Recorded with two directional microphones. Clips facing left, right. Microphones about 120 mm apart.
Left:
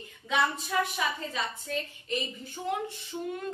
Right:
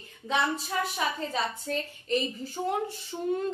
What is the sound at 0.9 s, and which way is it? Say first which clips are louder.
A woman's voice: right 2 dB; 35° right (ahead or behind).